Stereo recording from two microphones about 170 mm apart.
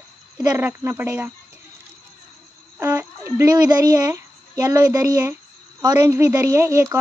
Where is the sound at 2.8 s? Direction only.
15° right (ahead or behind).